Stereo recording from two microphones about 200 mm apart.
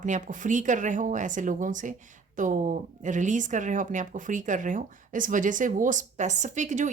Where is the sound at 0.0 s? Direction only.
40° right (ahead or behind).